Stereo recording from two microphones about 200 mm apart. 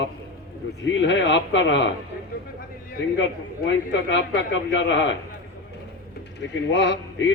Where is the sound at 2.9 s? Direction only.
65° left (ahead or behind).